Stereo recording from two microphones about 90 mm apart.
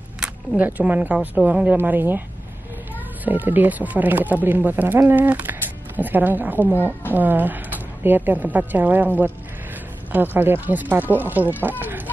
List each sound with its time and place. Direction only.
0.6 s speech: 20° right (ahead or behind)
3.3 s a woman's voice: 20° right (ahead or behind)